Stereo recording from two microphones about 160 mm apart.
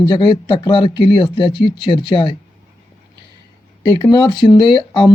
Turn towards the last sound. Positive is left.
turn(degrees=30)  # may be behind; listen again after turning